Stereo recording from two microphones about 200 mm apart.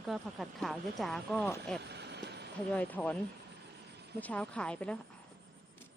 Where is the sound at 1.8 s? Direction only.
55° right (ahead or behind).